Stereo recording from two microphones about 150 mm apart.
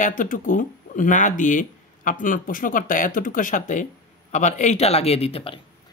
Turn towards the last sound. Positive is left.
turn(degrees=40)  # may be behind; listen again after turning